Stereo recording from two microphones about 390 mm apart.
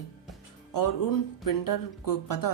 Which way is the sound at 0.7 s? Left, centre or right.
Left.